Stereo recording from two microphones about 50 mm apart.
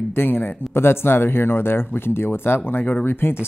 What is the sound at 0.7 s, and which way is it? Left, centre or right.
A man's voice, left.